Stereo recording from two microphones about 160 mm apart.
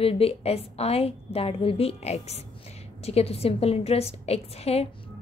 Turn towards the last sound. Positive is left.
turn(degrees=40)  # may be behind; listen again after turning